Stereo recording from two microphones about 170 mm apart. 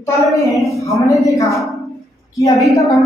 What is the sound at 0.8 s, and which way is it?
Child singing, 20° left (ahead or behind).